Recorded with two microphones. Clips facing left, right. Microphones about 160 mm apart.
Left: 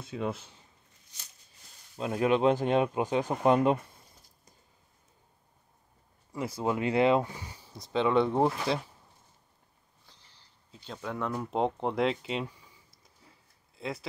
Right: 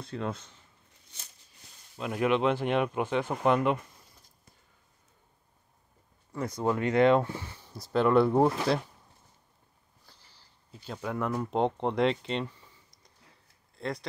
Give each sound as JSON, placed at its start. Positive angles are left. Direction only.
{"t": 0.0, "sound": "speech", "side_deg": 5}
{"t": 2.0, "sound": "speech", "side_deg": 30}
{"t": 6.4, "sound": "speech", "side_deg": 5}
{"t": 7.7, "sound": "speech", "side_deg": -5}
{"t": 10.7, "sound": "speech", "side_deg": -5}